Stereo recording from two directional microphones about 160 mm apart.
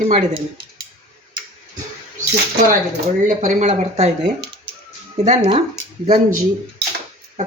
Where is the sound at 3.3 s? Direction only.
45° right (ahead or behind).